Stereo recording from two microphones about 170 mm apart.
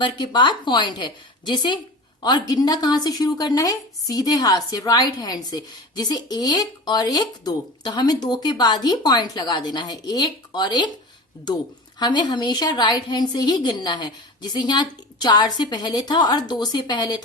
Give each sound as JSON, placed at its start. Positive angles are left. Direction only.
{"t": 0.0, "sound": "a woman's voice", "side_deg": 25}
{"t": 11.9, "sound": "a woman's voice", "side_deg": 25}